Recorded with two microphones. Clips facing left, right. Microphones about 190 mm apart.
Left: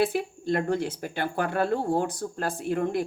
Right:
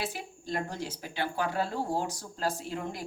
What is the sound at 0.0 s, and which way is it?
Speech, 60° left (ahead or behind).